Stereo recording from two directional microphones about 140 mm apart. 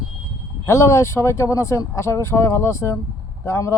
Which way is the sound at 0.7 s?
20° left (ahead or behind).